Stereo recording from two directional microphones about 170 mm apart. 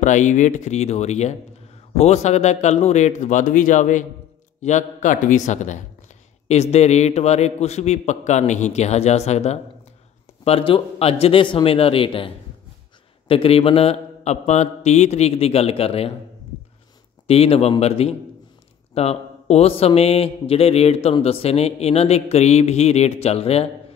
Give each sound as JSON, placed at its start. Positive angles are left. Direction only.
{"t": 0.0, "sound": "speech", "side_deg": 45}
{"t": 13.3, "sound": "speech", "side_deg": 35}
{"t": 17.3, "sound": "speech", "side_deg": 35}